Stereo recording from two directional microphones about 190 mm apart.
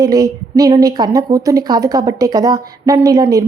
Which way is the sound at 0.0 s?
20° right (ahead or behind).